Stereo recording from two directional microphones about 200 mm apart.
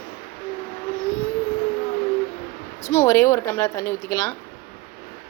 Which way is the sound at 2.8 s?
15° left (ahead or behind).